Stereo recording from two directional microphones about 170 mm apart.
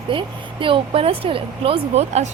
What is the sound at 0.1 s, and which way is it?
Speech, 30° right (ahead or behind).